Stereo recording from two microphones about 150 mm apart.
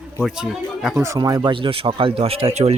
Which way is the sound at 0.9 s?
20° right (ahead or behind).